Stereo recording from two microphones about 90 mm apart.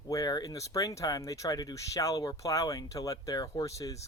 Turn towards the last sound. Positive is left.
turn(degrees=35)  # may be behind; listen again after turning